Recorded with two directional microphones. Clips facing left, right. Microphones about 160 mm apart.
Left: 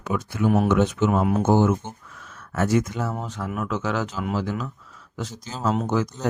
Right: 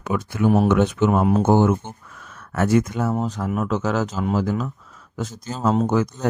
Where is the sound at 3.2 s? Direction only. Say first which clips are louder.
Right 5 dB; 40° right (ahead or behind).